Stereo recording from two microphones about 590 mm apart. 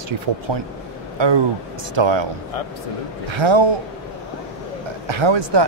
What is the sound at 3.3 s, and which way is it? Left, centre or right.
Speech, right.